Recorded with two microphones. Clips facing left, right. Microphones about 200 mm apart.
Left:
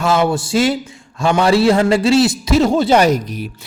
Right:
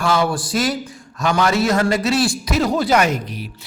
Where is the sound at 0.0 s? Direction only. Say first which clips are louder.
Left 3 dB; 25° left (ahead or behind).